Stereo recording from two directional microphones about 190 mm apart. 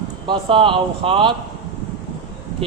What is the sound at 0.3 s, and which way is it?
Speech, 25° right (ahead or behind).